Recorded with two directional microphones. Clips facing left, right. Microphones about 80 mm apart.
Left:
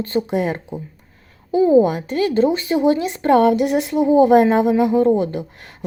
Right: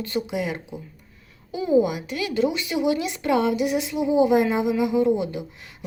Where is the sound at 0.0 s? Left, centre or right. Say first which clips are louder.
Left 6 dB; left.